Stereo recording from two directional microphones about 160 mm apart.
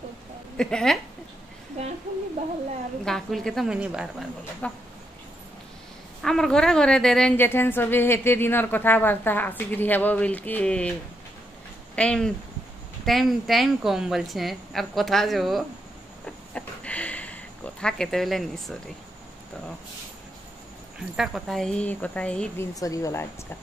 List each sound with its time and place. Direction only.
0.6 s a woman's voice: 5° left (ahead or behind)
3.1 s a woman's voice: centre (ahead or behind)
4.6 s a woman's voice: 10° left (ahead or behind)
6.2 s a woman's voice: 5° left (ahead or behind)
11.9 s a woman's voice: 5° left (ahead or behind)
16.5 s a sound: 10° left (ahead or behind)
21.2 s a woman's voice: centre (ahead or behind)
22.8 s speech: 20° left (ahead or behind)